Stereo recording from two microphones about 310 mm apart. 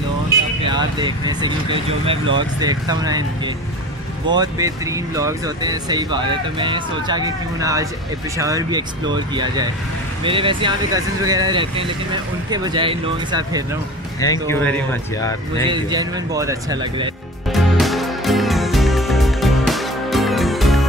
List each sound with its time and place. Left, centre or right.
0.7 s speech: centre
14.2 s speech: centre
15.6 s speech: centre
17.5 s music: centre